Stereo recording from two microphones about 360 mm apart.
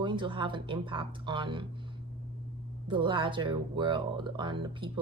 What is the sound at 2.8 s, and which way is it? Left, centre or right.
A woman's voice, centre.